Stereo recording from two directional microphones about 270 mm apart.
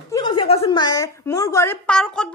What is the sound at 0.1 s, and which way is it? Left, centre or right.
A woman's voice, centre.